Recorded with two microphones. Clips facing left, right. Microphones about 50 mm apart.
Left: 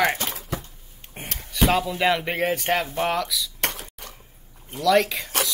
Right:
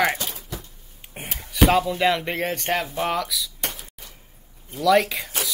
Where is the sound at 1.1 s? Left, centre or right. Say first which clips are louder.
Right 1 dB; centre.